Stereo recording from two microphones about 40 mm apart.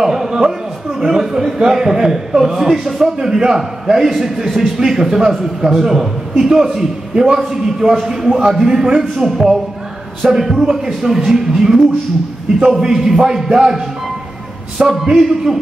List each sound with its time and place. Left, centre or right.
0.0 s a man's voice: centre
9.2 s a man's voice: centre
12.8 s a man's voice: centre